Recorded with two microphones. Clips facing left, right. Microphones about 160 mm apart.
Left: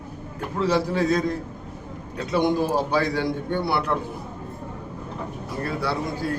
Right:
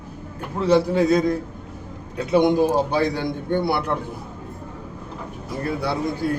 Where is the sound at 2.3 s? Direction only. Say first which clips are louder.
Right 4 dB; 15° right (ahead or behind).